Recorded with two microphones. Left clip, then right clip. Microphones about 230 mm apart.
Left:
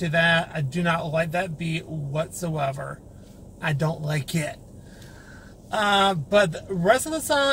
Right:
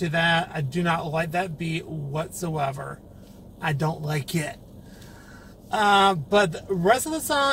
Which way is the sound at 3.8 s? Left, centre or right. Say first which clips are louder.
Even; centre.